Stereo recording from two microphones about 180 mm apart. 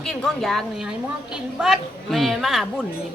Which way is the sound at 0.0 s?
5° left (ahead or behind).